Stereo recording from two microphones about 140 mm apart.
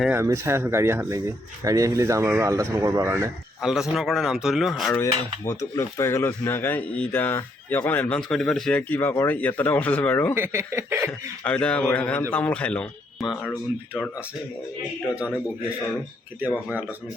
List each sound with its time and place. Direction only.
0.1 s speech: 20° right (ahead or behind)
3.6 s speech: 5° right (ahead or behind)
5.5 s speech: 20° left (ahead or behind)
8.3 s speech: 5° left (ahead or behind)
10.3 s chuckle: 15° right (ahead or behind)
11.4 s speech: 10° left (ahead or behind)
13.2 s speech: 5° right (ahead or behind)
16.4 s chuckle: 10° right (ahead or behind)